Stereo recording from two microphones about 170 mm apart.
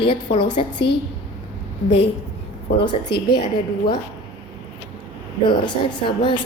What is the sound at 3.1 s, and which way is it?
Speech, 70° left (ahead or behind).